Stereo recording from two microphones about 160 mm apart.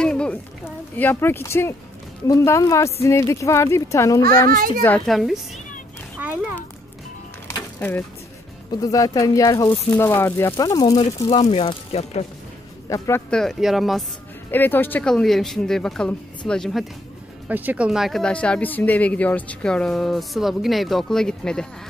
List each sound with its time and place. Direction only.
0.0 s a sound: 5° left (ahead or behind)
0.9 s speech: 15° left (ahead or behind)
4.5 s a child's voice: 60° right (ahead or behind)
4.8 s speech: 5° left (ahead or behind)
6.1 s a sound: 10° right (ahead or behind)
7.8 s speech: 10° left (ahead or behind)
8.7 s speech: 20° left (ahead or behind); by 12.3 s 40° left (ahead or behind)
12.9 s speech: 20° left (ahead or behind)
13.3 s speech: 5° left (ahead or behind)
14.5 s speech: 10° left (ahead or behind)
17.5 s speech: 10° right (ahead or behind)